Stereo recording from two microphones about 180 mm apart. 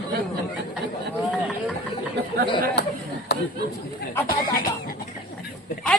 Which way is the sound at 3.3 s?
65° left (ahead or behind).